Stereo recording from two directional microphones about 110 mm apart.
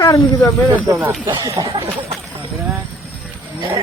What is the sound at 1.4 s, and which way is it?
Speech, 30° right (ahead or behind).